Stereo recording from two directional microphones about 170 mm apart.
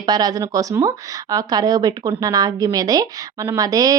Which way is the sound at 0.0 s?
25° right (ahead or behind).